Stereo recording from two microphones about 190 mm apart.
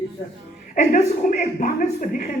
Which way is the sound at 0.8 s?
40° left (ahead or behind).